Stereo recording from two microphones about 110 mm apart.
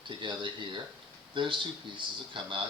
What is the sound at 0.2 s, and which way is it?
Speech, 45° right (ahead or behind).